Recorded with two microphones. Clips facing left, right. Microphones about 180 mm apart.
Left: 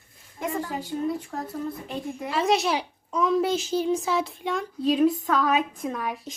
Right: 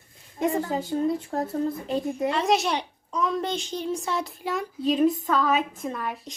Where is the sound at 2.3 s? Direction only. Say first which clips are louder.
Left 2 dB; centre (ahead or behind).